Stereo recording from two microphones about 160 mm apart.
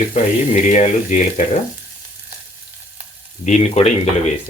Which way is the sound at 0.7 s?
50° left (ahead or behind).